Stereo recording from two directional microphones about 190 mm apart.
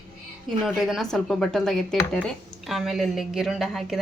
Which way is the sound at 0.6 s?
Centre (ahead or behind).